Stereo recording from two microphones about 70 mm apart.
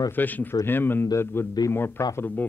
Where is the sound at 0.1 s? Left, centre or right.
Left.